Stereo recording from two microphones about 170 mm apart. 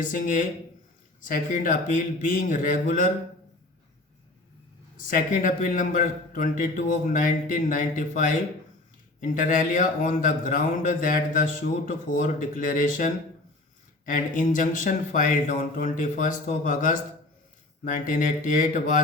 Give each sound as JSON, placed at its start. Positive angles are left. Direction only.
{"t": 0.0, "sound": "a man's voice", "side_deg": 50}
{"t": 4.9, "sound": "a man's voice", "side_deg": 55}